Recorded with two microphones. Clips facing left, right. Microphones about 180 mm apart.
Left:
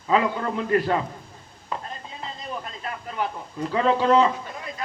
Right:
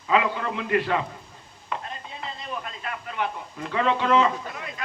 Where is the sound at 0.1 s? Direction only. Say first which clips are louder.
Left 1 dB; 40° left (ahead or behind).